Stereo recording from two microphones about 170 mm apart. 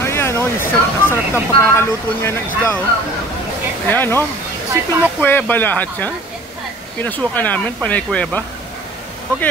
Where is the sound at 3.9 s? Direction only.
10° left (ahead or behind).